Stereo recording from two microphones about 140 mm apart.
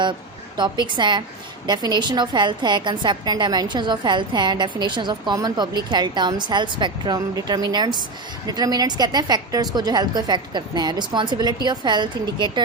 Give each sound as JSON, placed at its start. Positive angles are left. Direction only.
{"t": 0.6, "sound": "a woman's voice", "side_deg": -35}